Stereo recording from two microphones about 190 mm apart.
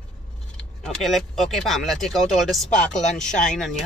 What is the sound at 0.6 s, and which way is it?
Speech, centre (ahead or behind).